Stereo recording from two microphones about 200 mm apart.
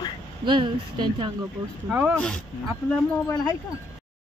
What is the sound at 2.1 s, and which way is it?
Speech, 5° left (ahead or behind).